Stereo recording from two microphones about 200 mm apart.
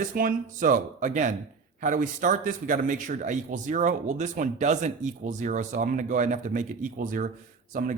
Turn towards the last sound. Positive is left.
turn(degrees=-40)  # may be behind; listen again after turning